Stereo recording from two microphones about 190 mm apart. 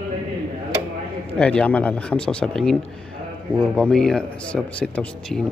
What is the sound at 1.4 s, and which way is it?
Speech, 5° left (ahead or behind).